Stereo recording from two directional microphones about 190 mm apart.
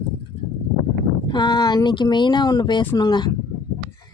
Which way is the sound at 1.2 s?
20° left (ahead or behind).